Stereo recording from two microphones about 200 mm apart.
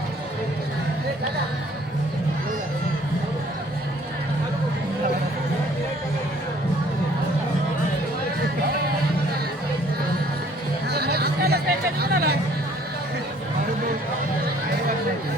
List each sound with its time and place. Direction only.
10.9 s chatter: 50° right (ahead or behind)